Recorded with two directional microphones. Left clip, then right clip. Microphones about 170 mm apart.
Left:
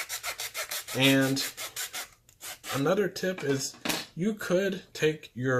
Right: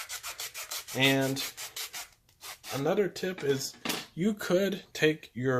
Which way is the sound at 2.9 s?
25° right (ahead or behind).